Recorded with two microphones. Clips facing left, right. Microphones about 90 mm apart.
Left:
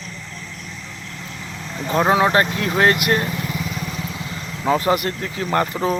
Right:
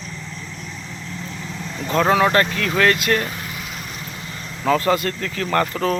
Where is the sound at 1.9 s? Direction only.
20° left (ahead or behind).